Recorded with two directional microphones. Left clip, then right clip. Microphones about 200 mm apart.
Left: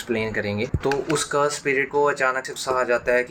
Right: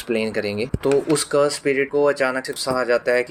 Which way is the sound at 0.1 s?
45° right (ahead or behind).